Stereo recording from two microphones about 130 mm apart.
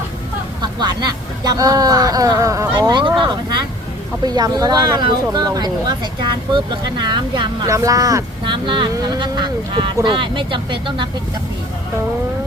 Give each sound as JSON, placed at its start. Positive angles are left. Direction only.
{"t": 0.6, "sound": "speech", "side_deg": -35}
{"t": 4.2, "sound": "speech", "side_deg": -30}
{"t": 8.5, "sound": "speech", "side_deg": -40}